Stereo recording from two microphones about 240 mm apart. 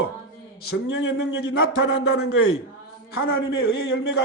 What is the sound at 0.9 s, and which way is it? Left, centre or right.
A man's voice, left.